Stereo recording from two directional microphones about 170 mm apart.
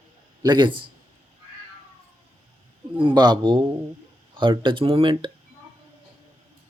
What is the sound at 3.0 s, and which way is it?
A man's voice, 25° right (ahead or behind).